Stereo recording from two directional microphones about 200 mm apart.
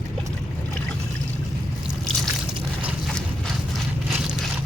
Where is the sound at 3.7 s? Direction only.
5° right (ahead or behind).